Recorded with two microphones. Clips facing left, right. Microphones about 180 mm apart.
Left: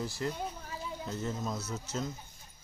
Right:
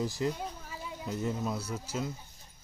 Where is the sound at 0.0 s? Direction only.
15° right (ahead or behind).